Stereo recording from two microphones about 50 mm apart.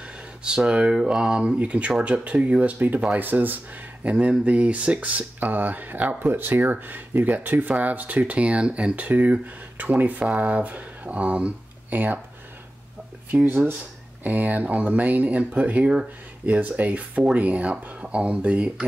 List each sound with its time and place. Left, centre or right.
0.4 s speech: centre
3.2 s speech: right
8.9 s speech: right
11.9 s speech: right
14.2 s speech: right